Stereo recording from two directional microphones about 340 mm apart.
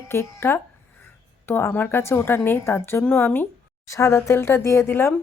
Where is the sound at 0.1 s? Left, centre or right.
Centre.